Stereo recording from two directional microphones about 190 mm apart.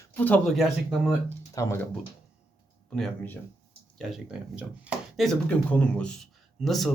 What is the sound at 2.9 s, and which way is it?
Speech, 5° left (ahead or behind).